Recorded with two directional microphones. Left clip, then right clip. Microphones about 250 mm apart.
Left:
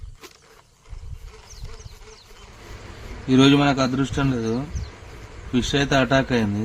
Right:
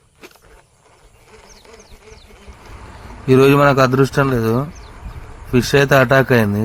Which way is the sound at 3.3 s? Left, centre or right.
Right.